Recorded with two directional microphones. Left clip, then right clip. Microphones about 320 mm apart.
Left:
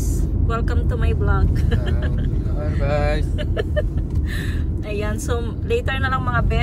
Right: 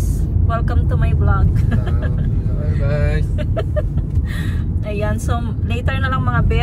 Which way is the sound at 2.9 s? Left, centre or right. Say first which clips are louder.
Left 2 dB; centre.